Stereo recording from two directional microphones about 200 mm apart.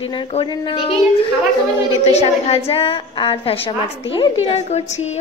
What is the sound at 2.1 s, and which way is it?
A woman's voice, 30° left (ahead or behind).